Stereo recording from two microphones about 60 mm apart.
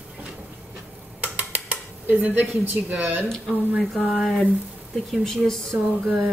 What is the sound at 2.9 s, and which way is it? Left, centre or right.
Speech, right.